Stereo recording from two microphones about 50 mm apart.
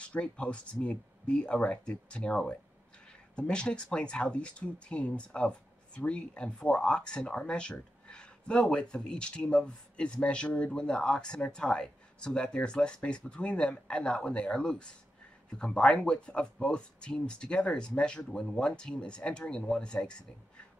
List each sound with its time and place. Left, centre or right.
0.0 s speech: left